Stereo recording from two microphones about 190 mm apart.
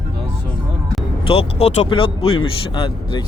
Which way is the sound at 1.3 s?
30° left (ahead or behind).